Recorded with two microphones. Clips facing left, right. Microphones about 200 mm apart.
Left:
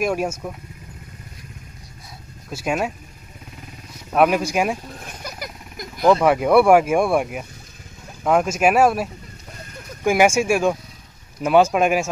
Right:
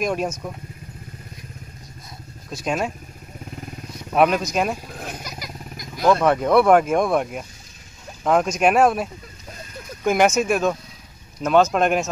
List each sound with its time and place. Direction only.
0.0 s speech: 5° left (ahead or behind)
2.5 s speech: 5° left (ahead or behind)
4.1 s speech: 5° left (ahead or behind)
5.2 s vehicle: 55° left (ahead or behind)
6.0 s speech: 10° left (ahead or behind)